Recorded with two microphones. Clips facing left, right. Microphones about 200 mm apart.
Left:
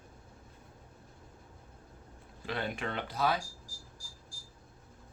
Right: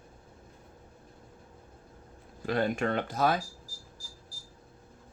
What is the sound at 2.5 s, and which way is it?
Speech, 45° right (ahead or behind).